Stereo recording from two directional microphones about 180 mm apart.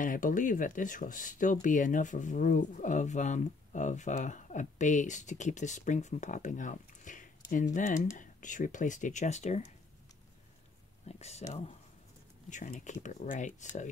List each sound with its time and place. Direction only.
0.0 s speech: 45° left (ahead or behind)
11.1 s speech: 35° left (ahead or behind)